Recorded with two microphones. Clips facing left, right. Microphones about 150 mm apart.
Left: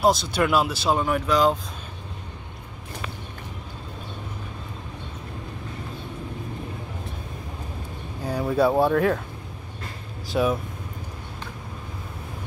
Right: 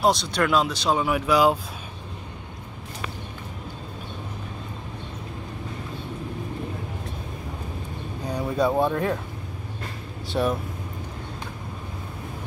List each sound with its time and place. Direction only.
0.0 s speech: centre (ahead or behind)
8.3 s speech: 5° left (ahead or behind)
10.3 s speech: centre (ahead or behind)